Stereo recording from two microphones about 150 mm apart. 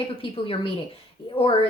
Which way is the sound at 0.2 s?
35° left (ahead or behind).